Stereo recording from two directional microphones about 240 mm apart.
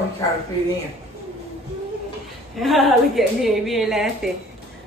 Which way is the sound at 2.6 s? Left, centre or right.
Centre.